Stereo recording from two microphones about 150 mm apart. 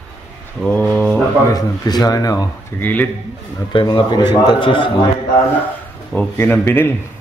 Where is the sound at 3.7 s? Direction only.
30° left (ahead or behind).